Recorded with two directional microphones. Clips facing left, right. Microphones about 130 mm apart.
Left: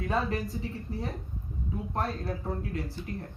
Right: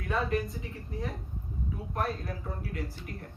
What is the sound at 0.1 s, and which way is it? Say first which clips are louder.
Speech: right 1 dB; 30° left (ahead or behind).